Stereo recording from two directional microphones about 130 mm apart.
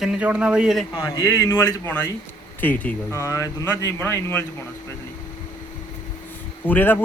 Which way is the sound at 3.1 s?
25° left (ahead or behind).